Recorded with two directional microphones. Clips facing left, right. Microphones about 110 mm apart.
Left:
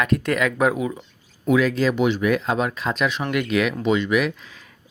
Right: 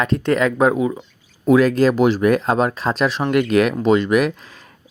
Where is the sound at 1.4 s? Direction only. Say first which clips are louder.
Right 5 dB; 45° right (ahead or behind).